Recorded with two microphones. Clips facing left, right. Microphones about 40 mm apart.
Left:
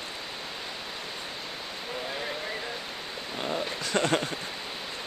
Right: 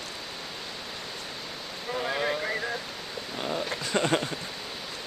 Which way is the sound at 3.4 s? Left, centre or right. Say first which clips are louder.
Even; centre.